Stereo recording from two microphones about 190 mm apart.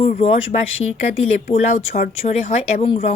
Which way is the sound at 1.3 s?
50° left (ahead or behind).